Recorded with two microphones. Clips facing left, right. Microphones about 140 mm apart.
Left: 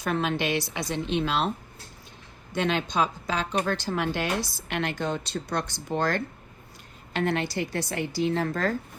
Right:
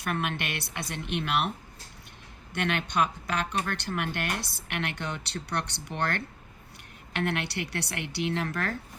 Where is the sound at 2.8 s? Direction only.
60° right (ahead or behind).